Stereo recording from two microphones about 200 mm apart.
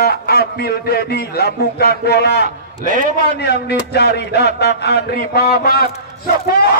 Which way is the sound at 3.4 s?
55° left (ahead or behind).